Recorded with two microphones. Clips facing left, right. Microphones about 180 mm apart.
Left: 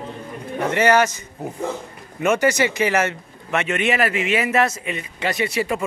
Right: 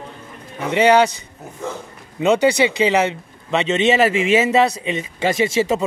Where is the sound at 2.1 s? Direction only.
15° right (ahead or behind).